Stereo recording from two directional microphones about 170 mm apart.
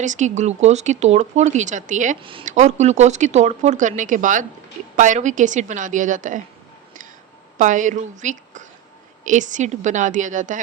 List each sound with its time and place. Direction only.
0.0 s a woman's voice: 45° right (ahead or behind)
7.6 s a woman's voice: 45° right (ahead or behind)